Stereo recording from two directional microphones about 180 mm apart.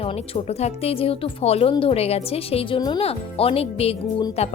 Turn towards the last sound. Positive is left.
turn(degrees=35)  # may be behind; listen again after turning